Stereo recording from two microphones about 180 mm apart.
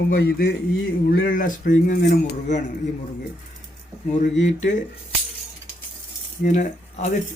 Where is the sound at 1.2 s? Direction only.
50° left (ahead or behind).